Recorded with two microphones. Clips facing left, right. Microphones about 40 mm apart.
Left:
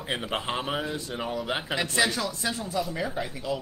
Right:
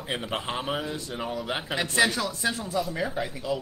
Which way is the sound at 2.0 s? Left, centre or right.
Centre.